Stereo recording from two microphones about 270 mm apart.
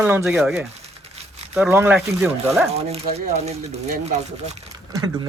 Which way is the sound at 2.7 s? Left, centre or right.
Right.